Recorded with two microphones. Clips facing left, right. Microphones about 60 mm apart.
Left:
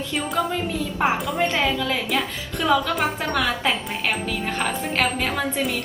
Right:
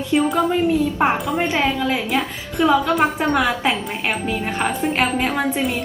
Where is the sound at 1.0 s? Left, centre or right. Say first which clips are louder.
Right 3 dB; centre.